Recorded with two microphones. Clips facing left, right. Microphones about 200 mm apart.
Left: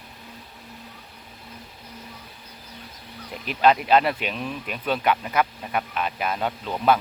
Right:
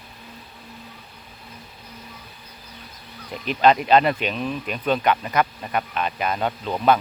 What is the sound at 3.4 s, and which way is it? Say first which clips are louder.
Speech: right 2 dB; 5° left (ahead or behind).